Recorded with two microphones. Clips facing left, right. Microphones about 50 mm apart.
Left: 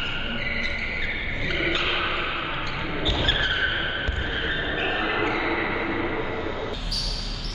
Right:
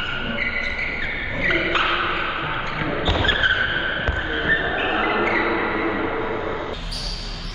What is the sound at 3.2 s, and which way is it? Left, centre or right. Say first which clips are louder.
Vehicle: right 5 dB; right.